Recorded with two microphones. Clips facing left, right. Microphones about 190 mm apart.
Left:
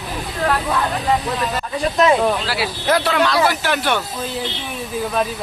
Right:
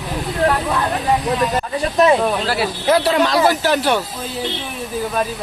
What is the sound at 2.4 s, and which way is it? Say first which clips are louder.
Speech: right 3 dB; 50° right (ahead or behind).